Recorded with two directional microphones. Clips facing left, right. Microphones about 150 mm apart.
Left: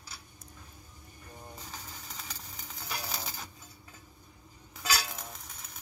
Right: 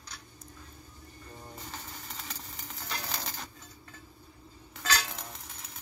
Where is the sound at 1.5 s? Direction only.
Centre (ahead or behind).